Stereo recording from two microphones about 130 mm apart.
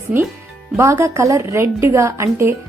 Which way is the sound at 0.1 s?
10° right (ahead or behind).